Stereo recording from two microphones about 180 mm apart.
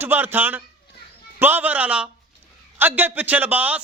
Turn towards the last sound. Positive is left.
turn(degrees=-10)  # may be behind; listen again after turning